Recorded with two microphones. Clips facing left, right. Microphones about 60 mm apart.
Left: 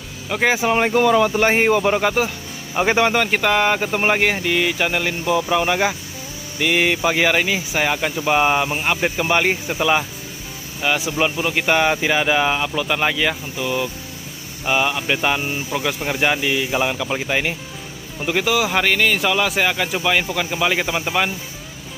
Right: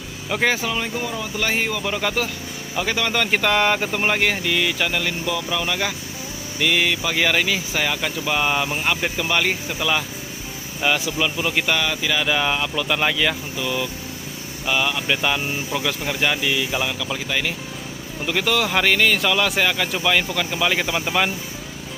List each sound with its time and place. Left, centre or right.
0.3 s speech: centre
0.7 s speech: left
1.0 s speech: left
1.3 s speech: left
2.0 s speech: centre
2.7 s speech: left
3.2 s speech: centre
3.9 s speech: centre
11.1 s speech: left
11.3 s speech: centre
11.7 s speech: left
17.0 s speech: left
18.2 s speech: centre